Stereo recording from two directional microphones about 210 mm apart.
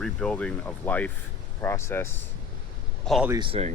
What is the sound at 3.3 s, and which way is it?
Speech, 25° right (ahead or behind).